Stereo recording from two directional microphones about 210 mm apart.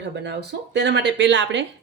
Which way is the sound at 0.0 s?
55° right (ahead or behind).